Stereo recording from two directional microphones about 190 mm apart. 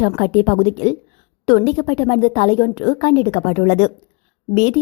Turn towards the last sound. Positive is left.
turn(degrees=35)  # may be behind; listen again after turning